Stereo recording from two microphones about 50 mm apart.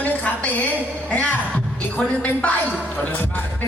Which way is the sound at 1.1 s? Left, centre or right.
Left.